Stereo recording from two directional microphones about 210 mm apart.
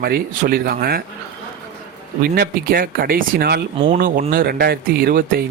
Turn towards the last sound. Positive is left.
turn(degrees=-45)  # may be behind; listen again after turning